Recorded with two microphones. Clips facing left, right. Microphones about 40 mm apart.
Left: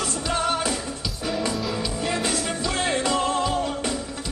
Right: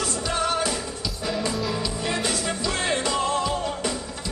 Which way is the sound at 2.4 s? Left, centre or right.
Left.